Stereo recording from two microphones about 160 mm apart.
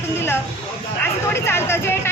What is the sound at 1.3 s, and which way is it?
Speech, 15° left (ahead or behind).